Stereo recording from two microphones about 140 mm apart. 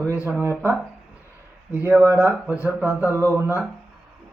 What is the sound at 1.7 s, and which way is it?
Speech, 15° right (ahead or behind).